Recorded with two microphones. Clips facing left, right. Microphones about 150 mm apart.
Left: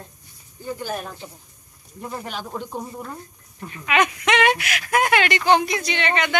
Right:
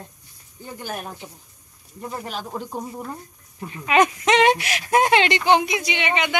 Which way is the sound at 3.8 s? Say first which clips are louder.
Right 3 dB; 35° right (ahead or behind).